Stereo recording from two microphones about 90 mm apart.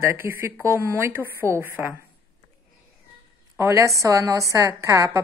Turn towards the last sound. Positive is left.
turn(degrees=-35)  # may be behind; listen again after turning